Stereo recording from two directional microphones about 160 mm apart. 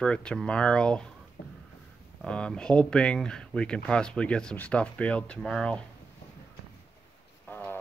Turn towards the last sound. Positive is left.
turn(degrees=10)  # may be behind; listen again after turning